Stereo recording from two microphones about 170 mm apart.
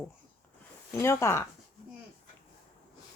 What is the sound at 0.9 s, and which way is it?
Speech, 15° left (ahead or behind).